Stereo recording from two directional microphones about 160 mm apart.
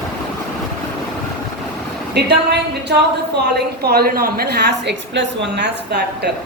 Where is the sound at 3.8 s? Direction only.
80° right.